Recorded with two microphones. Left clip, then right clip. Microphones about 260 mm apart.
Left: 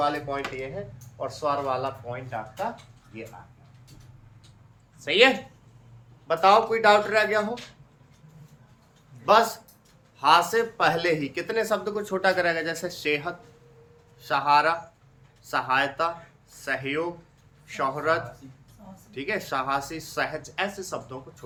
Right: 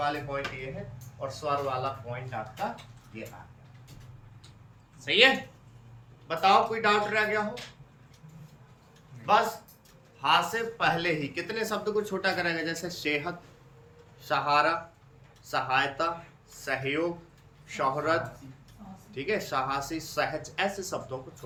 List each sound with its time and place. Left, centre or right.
0.0 s speech: left
4.9 s speech: centre
9.3 s speech: left; by 21.2 s centre